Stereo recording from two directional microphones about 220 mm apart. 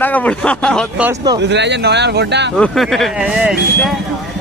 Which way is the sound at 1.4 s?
50° right (ahead or behind).